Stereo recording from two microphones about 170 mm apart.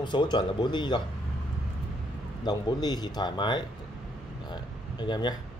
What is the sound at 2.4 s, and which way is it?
Speech, 25° left (ahead or behind).